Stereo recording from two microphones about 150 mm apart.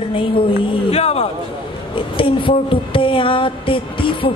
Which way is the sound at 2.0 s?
35° left (ahead or behind).